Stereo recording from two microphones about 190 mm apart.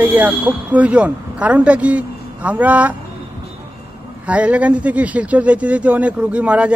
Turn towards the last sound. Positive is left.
turn(degrees=-5)  # may be behind; listen again after turning